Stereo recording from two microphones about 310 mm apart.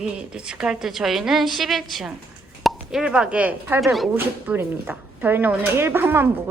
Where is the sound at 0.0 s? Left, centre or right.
Centre.